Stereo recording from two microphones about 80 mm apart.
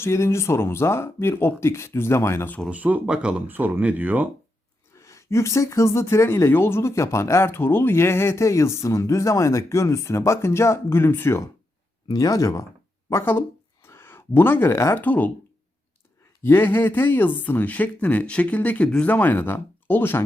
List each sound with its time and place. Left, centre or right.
0.0 s speech: left
2.6 s speech: centre
3.4 s speech: right
4.9 s speech: left
12.0 s speech: left
13.1 s speech: left
13.8 s a sound: left
15.0 s speech: left
16.4 s speech: left